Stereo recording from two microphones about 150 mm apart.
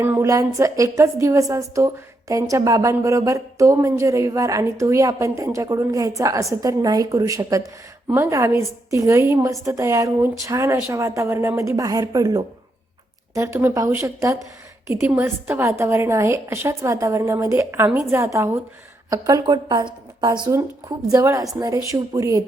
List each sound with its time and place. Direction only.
0.0 s a woman's voice: 15° right (ahead or behind)